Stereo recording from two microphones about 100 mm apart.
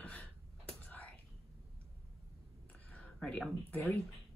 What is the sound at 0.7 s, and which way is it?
Whispering, 15° left (ahead or behind).